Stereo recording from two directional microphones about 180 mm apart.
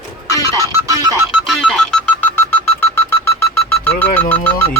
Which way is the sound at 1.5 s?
5° left (ahead or behind).